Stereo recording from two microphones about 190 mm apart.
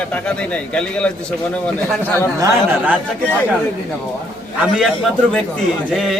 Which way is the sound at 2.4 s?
10° right (ahead or behind).